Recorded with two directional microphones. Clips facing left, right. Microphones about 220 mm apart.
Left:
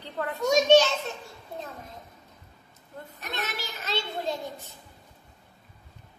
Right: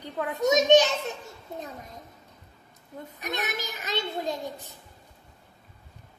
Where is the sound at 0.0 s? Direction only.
15° right (ahead or behind).